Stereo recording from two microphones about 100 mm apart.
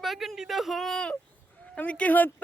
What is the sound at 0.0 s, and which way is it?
A woman's voice, centre (ahead or behind).